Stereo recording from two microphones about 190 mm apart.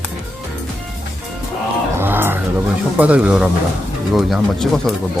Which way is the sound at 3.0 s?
5° right (ahead or behind).